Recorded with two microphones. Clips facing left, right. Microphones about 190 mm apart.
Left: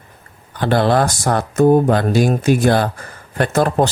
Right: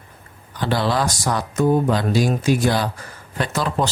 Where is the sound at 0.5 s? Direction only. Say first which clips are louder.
Left 6 dB; 55° left (ahead or behind).